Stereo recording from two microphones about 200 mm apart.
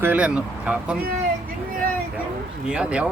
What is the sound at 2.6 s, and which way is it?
Speech, 5° right (ahead or behind).